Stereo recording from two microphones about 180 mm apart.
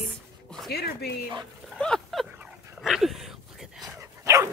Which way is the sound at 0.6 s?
60° left (ahead or behind).